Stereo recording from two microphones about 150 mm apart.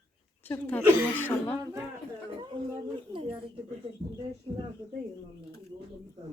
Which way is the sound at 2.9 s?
35° right (ahead or behind).